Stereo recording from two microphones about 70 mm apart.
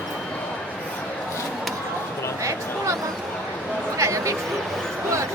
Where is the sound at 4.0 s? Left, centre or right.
Right.